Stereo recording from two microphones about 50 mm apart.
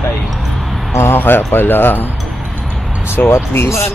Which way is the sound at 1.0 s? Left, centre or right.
Left.